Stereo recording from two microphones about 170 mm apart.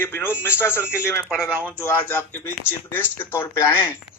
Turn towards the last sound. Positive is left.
turn(degrees=15)  # may be behind; listen again after turning